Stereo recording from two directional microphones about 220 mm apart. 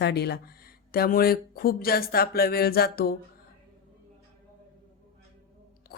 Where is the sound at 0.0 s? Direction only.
50° left (ahead or behind).